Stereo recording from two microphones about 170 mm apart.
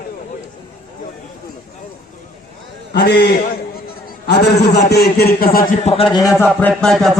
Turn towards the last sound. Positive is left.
turn(degrees=0)  # may be behind; listen again after turning